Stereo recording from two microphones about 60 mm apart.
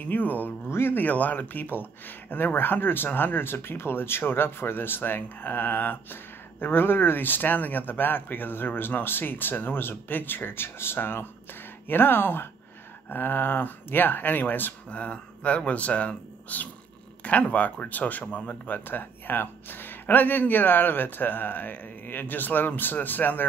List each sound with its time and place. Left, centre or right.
0.0 s speech: left
0.7 s speech: left
14.9 s speech: left
18.9 s speech: left